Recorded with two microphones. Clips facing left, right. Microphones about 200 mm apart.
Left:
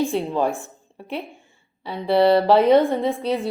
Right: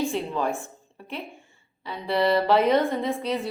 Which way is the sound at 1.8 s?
30° left (ahead or behind).